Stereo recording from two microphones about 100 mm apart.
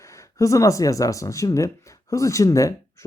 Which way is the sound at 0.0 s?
30° left (ahead or behind).